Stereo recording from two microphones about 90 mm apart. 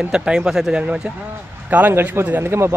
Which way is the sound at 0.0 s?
10° right (ahead or behind).